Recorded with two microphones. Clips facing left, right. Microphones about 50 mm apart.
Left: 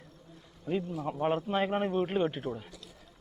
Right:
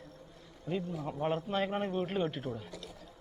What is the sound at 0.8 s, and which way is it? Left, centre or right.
Speech, left.